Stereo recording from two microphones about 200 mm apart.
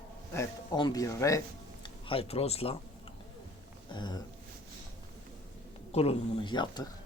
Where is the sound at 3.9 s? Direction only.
20° left (ahead or behind).